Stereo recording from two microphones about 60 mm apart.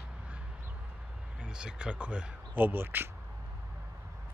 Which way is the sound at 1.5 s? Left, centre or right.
Centre.